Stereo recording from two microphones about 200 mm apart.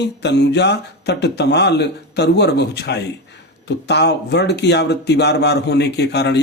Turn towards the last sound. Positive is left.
turn(degrees=55)  # may be behind; listen again after turning